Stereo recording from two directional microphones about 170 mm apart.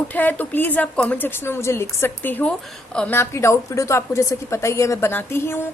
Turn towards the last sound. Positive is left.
turn(degrees=15)  # may be behind; listen again after turning